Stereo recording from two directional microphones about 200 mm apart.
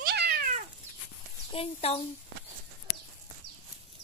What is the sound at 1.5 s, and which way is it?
Speech, 30° left (ahead or behind).